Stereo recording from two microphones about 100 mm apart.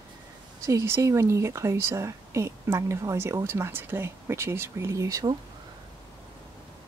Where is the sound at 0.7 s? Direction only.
25° right (ahead or behind).